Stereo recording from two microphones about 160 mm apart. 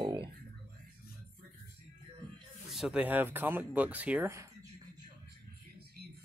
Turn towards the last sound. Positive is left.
turn(degrees=-80)